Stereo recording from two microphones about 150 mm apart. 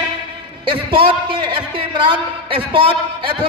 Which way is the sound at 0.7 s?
35° right (ahead or behind).